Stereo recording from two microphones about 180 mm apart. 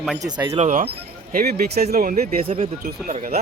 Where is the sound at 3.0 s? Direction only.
50° right (ahead or behind).